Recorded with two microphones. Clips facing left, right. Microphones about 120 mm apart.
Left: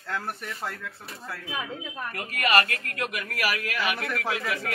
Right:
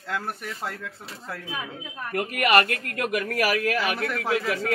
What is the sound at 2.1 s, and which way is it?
Speech, 55° right (ahead or behind).